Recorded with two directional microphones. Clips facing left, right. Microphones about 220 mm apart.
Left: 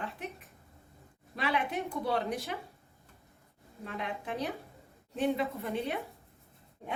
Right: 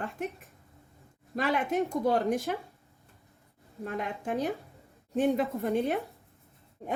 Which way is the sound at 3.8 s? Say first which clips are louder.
Right 4 dB; 45° right (ahead or behind).